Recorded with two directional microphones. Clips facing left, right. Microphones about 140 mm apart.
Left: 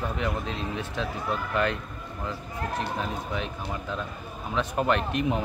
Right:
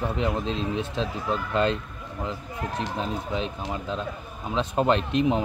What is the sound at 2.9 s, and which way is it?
Speech, 25° right (ahead or behind).